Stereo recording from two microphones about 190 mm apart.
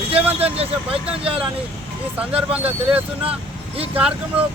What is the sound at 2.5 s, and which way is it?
Speech, 10° right (ahead or behind).